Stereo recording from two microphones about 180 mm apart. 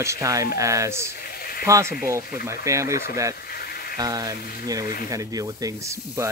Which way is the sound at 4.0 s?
20° right (ahead or behind).